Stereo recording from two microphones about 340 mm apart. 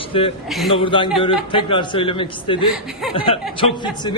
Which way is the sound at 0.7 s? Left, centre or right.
Centre.